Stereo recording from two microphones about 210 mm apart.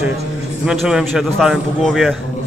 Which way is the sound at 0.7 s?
5° right (ahead or behind).